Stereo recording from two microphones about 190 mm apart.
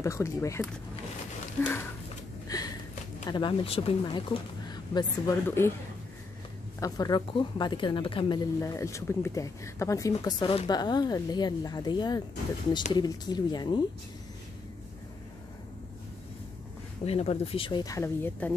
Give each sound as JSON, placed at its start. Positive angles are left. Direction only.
{"t": 0.0, "sound": "speech", "side_deg": 15}
{"t": 2.4, "sound": "a sound", "side_deg": 20}
{"t": 3.3, "sound": "speech", "side_deg": 25}
{"t": 4.9, "sound": "speech", "side_deg": 15}
{"t": 6.8, "sound": "speech", "side_deg": 20}
{"t": 8.5, "sound": "speech", "side_deg": 15}
{"t": 17.0, "sound": "speech", "side_deg": 30}